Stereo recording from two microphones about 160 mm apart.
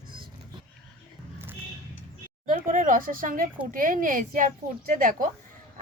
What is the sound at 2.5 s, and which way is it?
A woman's voice, 55° right (ahead or behind).